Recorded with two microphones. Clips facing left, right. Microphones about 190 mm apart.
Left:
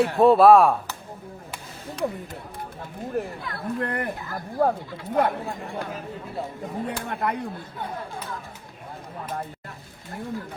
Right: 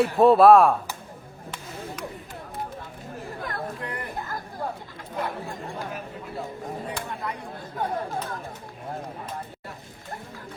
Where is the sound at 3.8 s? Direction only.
60° left (ahead or behind).